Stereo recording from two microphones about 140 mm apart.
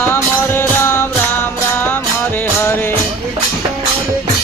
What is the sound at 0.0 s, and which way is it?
Music, 15° left (ahead or behind).